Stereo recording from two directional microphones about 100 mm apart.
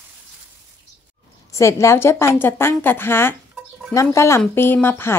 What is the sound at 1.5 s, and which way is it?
Speech, 30° left (ahead or behind).